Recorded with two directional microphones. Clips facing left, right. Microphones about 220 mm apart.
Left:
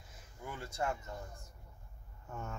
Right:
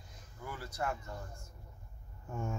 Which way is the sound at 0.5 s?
25° left (ahead or behind).